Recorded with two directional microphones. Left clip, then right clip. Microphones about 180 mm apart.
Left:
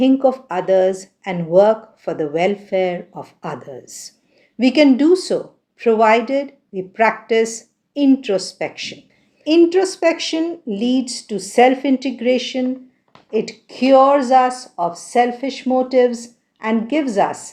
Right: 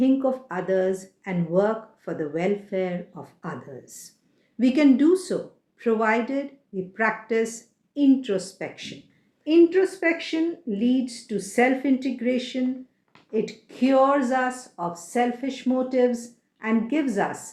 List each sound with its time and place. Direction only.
0.0 s speech: 35° left (ahead or behind)
9.4 s speech: 45° left (ahead or behind)